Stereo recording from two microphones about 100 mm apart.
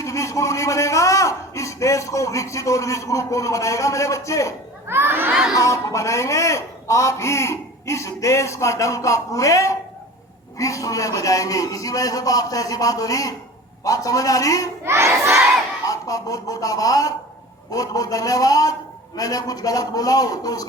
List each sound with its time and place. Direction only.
0.0 s a man's voice: 30° left (ahead or behind)
4.9 s crowd: 25° right (ahead or behind)
5.3 s speech: 5° right (ahead or behind)
5.5 s speech: 30° left (ahead or behind)
14.8 s crowd: 25° right (ahead or behind)
15.9 s speech: 35° left (ahead or behind)